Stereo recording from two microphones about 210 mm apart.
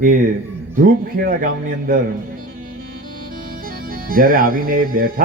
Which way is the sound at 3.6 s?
40° right (ahead or behind).